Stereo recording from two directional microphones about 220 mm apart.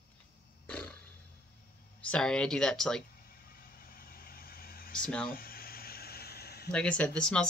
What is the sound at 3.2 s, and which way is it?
Vehicle, 40° left (ahead or behind).